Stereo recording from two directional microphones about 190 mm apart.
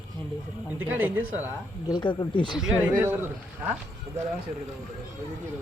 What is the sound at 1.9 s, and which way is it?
Speech, 25° left (ahead or behind).